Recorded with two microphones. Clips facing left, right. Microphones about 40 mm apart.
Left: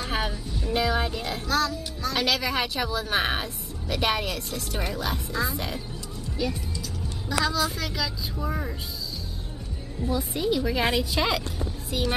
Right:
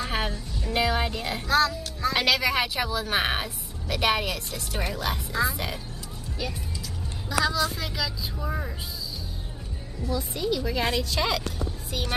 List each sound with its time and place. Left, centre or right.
0.0 s music: centre
0.3 s music: centre
0.8 s music: centre
2.0 s speech: centre
2.3 s a woman's voice: centre
7.2 s a woman's voice: centre
10.0 s a woman's voice: centre